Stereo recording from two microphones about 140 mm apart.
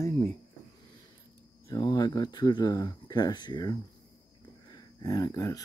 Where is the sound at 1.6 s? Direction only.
30° left (ahead or behind).